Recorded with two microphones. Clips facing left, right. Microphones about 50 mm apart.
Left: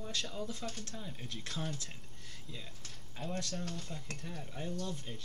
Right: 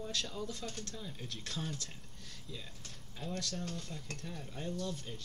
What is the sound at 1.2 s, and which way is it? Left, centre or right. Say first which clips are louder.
Speech: left 1 dB; centre.